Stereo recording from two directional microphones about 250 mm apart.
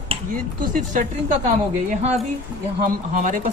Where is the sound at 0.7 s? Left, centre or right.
Right.